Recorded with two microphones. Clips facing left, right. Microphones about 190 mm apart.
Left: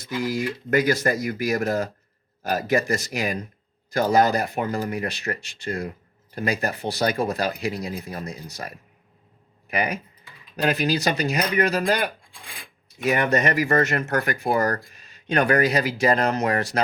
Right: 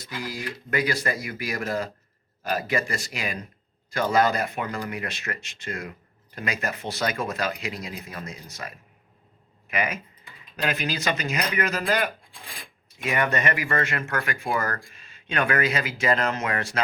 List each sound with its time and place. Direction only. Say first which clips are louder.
0.2 s speech: left 8 dB; 45° left (ahead or behind)